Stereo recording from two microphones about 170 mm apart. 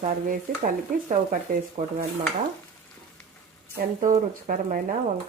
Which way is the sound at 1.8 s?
45° right (ahead or behind).